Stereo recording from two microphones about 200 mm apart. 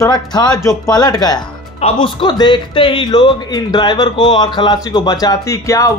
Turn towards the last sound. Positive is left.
turn(degrees=15)  # may be behind; listen again after turning